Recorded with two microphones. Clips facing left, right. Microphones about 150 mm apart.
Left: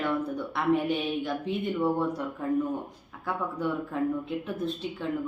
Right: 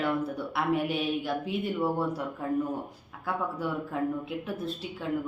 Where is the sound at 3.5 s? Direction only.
5° right (ahead or behind).